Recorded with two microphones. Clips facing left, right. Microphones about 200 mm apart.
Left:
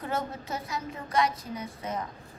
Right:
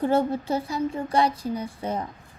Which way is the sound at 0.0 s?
30° right (ahead or behind).